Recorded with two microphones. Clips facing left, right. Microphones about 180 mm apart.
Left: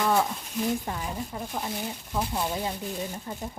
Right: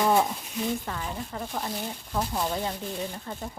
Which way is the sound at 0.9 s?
15° left (ahead or behind).